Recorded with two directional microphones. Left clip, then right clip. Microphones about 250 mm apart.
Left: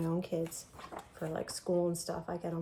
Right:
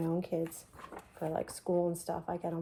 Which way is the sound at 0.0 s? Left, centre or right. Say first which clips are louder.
Right 1 dB; centre.